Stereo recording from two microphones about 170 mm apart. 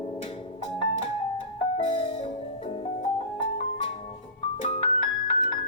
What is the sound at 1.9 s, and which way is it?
Music, 30° left (ahead or behind).